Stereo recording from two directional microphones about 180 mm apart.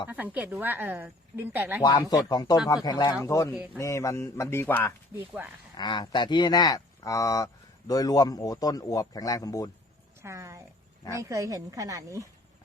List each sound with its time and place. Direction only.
0.1 s speech: 10° right (ahead or behind)
1.8 s a man's voice: 20° left (ahead or behind)
5.1 s speech: 10° right (ahead or behind)
5.7 s speech: 25° left (ahead or behind)
10.2 s speech: 15° right (ahead or behind)